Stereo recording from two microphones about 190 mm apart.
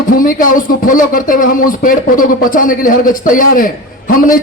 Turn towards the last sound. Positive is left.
turn(degrees=45)  # may be behind; listen again after turning